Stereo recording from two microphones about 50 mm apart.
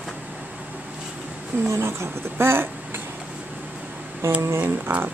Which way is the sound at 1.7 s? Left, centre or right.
Right.